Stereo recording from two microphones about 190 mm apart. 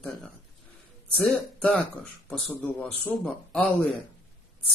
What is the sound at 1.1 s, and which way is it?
Speech, 5° left (ahead or behind).